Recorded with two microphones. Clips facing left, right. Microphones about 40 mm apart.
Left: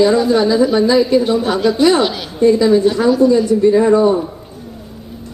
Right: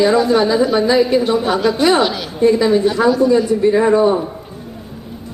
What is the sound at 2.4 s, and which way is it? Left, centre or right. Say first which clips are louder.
Speech: left 2 dB; centre.